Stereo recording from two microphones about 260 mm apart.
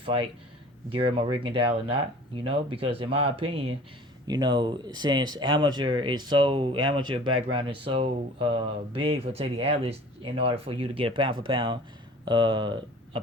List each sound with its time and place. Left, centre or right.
0.0 s speech: right